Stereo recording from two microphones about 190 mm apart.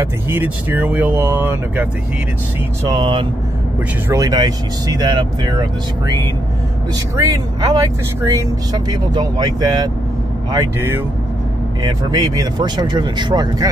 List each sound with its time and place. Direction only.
0.0 s speech: 10° right (ahead or behind)
2.9 s speech: 25° right (ahead or behind)